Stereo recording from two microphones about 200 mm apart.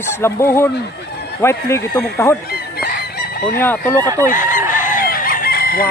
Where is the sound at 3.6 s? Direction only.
10° left (ahead or behind).